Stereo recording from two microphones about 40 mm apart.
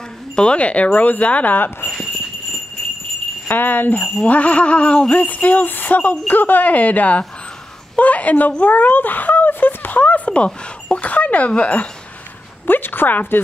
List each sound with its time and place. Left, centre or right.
0.4 s speech: left
3.4 s speech: left
4.0 s speech: left
5.1 s speech: left
8.0 s a sound: left
12.6 s a woman's voice: left